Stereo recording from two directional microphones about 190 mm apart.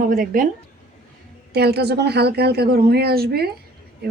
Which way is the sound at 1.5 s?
60° right (ahead or behind).